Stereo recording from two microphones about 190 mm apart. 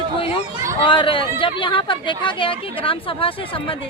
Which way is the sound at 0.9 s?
25° left (ahead or behind).